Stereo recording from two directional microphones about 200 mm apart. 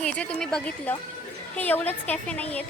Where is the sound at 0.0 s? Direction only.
5° left (ahead or behind).